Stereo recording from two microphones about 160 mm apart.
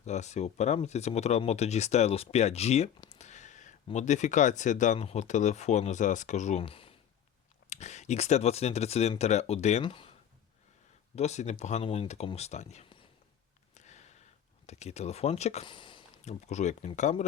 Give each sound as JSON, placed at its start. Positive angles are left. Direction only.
{"t": 0.0, "sound": "speech", "side_deg": 45}
{"t": 3.1, "sound": "a sound", "side_deg": 45}
{"t": 3.9, "sound": "speech", "side_deg": 45}
{"t": 7.7, "sound": "speech", "side_deg": 45}
{"t": 9.8, "sound": "speech", "side_deg": 35}
{"t": 11.1, "sound": "speech", "side_deg": 45}
{"t": 13.7, "sound": "a sound", "side_deg": 45}
{"t": 14.7, "sound": "speech", "side_deg": 45}
{"t": 15.6, "sound": "a sound", "side_deg": 30}
{"t": 16.2, "sound": "speech", "side_deg": 45}